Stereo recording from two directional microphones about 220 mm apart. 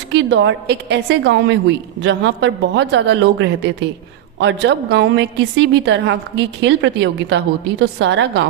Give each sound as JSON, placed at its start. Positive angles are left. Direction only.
{"t": 0.1, "sound": "a woman's voice", "side_deg": -55}